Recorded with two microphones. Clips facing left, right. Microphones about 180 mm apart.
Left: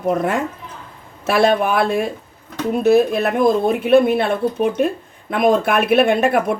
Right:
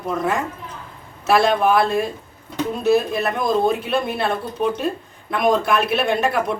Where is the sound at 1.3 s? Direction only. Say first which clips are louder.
Left 1 dB; 55° left (ahead or behind).